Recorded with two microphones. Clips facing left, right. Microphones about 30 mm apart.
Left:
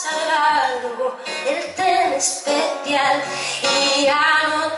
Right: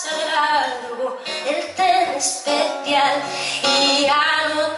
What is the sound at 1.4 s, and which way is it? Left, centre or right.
Music, centre.